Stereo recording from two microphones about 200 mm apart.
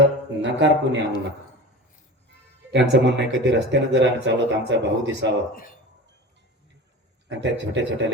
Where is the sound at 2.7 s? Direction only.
60° right (ahead or behind).